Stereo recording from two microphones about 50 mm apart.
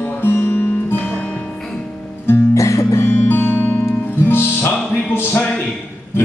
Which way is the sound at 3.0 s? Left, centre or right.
Left.